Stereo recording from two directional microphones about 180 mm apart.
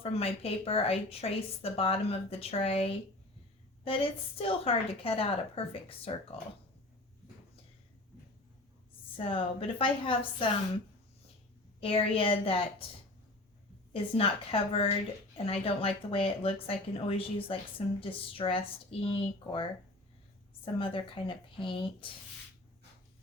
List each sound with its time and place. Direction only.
0.0 s speech: 30° left (ahead or behind)
9.1 s speech: 30° left (ahead or behind)
11.8 s speech: 30° left (ahead or behind)
13.9 s speech: 30° left (ahead or behind)
20.7 s speech: 30° left (ahead or behind)